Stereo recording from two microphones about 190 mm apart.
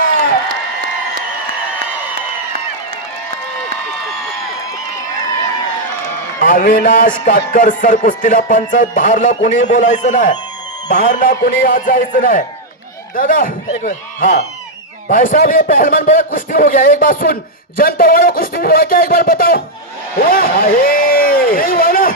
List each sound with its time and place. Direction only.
6.4 s a man's voice: 40° left (ahead or behind)
7.3 s music: 45° left (ahead or behind)
20.2 s a sound: 50° left (ahead or behind)